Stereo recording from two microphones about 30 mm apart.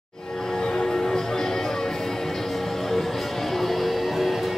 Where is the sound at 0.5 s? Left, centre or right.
Left.